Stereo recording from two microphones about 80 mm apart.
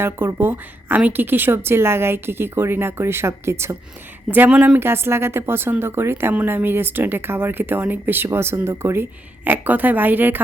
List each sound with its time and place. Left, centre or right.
0.0 s speech: right
4.3 s speech: right
4.8 s speech: right